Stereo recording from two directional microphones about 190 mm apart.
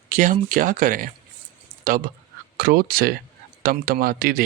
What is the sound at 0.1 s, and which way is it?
Speech, 45° right (ahead or behind).